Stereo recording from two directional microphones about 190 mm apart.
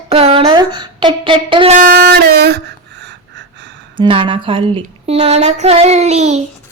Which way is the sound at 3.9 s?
25° right (ahead or behind).